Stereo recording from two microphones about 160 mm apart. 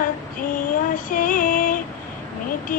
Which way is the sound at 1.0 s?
60° left (ahead or behind).